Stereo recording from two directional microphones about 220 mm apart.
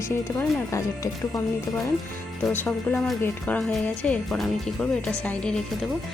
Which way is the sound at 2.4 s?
10° left (ahead or behind).